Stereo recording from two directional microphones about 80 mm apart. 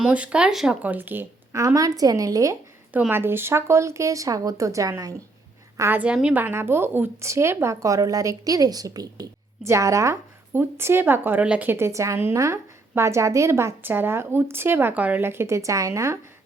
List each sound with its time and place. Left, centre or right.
0.0 s speech: centre
0.8 s a woman's voice: right
1.5 s a woman's voice: right
2.9 s a woman's voice: right
5.9 s a woman's voice: centre; by 10.2 s right
10.5 s a woman's voice: right
11.4 s speech: centre
11.7 s a woman's voice: right